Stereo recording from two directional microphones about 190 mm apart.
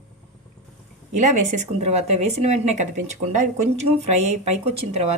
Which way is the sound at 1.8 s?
35° right (ahead or behind).